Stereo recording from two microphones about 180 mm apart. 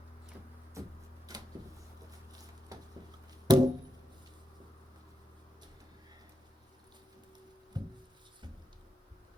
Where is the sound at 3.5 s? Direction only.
20° right (ahead or behind).